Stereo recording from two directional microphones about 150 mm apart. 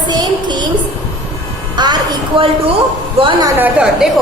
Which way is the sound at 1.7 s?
30° right (ahead or behind).